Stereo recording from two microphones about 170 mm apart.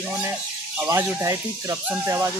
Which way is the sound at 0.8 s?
15° right (ahead or behind).